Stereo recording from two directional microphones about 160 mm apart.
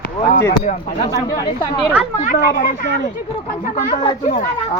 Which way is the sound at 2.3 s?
65° left (ahead or behind).